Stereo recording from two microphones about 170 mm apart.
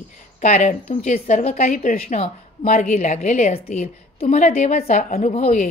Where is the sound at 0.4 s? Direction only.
45° left (ahead or behind).